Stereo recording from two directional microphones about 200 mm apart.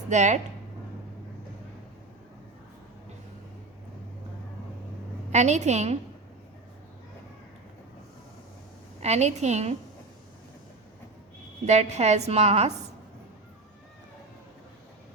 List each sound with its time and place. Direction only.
0.1 s a woman's voice: 35° right (ahead or behind)
5.3 s a woman's voice: 35° right (ahead or behind)
9.0 s a woman's voice: 35° right (ahead or behind)
11.6 s a woman's voice: 35° right (ahead or behind)